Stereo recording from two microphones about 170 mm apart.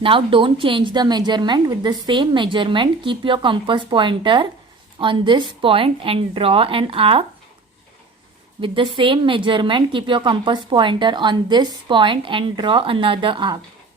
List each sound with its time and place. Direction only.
0.0 s a woman's voice: 30° right (ahead or behind)
8.6 s a woman's voice: 30° right (ahead or behind)